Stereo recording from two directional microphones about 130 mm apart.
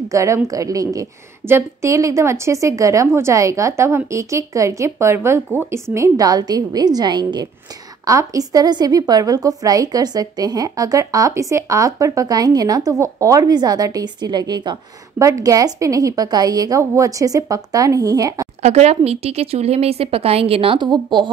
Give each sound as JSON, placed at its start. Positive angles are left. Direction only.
{"t": 0.1, "sound": "a woman's voice", "side_deg": -25}
{"t": 15.1, "sound": "a woman's voice", "side_deg": -25}
{"t": 18.6, "sound": "a woman's voice", "side_deg": -55}